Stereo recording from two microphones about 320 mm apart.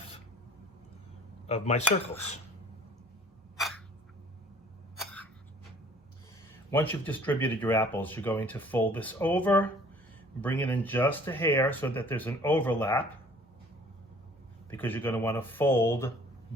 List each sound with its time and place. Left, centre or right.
1.5 s speech: centre
6.7 s speech: centre
14.7 s speech: centre